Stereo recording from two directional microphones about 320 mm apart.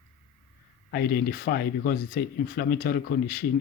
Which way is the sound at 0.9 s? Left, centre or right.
Left.